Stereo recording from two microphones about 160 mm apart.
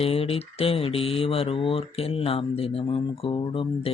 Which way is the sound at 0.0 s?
35° left (ahead or behind).